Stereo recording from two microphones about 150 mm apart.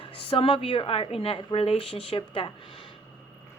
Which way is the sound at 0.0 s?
35° left (ahead or behind).